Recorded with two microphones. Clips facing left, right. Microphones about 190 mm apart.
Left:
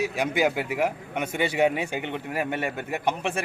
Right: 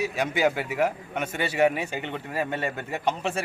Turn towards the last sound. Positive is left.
turn(degrees=10)  # may be behind; listen again after turning